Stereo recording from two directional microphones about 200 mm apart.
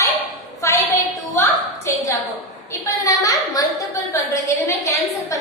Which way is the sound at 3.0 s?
20° left (ahead or behind).